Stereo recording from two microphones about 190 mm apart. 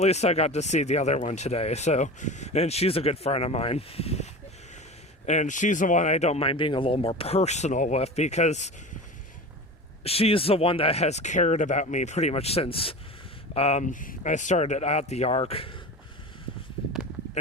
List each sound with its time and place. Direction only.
0.0 s speech: 35° left (ahead or behind)
10.0 s speech: 30° left (ahead or behind)